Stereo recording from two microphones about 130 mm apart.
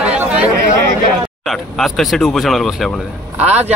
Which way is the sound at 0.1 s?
10° right (ahead or behind).